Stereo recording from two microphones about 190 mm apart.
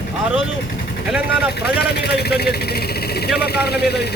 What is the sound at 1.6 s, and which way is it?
A man's voice, 60° left (ahead or behind).